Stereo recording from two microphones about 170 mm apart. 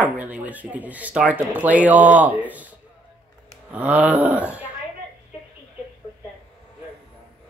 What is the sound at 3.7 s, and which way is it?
Speech, 10° right (ahead or behind).